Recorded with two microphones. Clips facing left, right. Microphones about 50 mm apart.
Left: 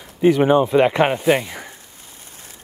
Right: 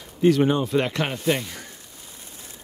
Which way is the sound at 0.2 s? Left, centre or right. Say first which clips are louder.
Left 5 dB; centre.